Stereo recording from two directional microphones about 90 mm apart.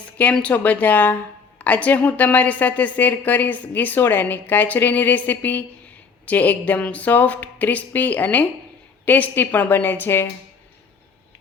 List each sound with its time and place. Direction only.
0.3 s a woman's voice: 15° left (ahead or behind)